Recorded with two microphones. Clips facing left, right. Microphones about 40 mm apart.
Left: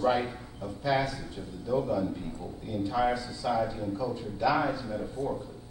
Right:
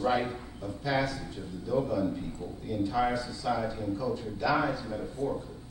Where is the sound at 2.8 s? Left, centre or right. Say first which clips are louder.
Left 1 dB; centre.